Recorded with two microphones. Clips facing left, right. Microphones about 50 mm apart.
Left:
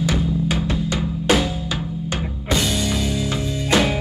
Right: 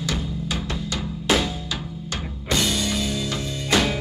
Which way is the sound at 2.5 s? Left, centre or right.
Centre.